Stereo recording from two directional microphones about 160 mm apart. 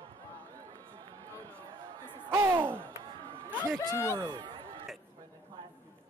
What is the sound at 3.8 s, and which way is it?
Speech, 20° left (ahead or behind).